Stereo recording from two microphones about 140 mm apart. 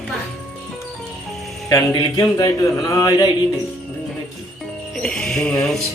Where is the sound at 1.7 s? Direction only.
25° left (ahead or behind).